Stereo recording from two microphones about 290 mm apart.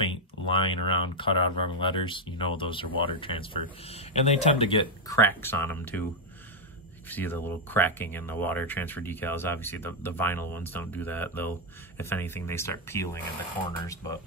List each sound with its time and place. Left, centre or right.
0.0 s speech: centre
7.1 s speech: centre